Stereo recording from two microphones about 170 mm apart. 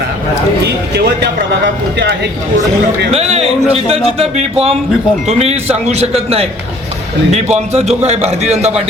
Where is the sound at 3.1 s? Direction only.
40° right (ahead or behind).